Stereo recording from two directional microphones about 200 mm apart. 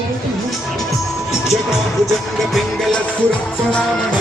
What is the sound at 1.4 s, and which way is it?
Music, centre (ahead or behind).